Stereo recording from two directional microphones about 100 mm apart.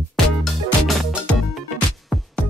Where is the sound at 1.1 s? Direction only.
Centre (ahead or behind).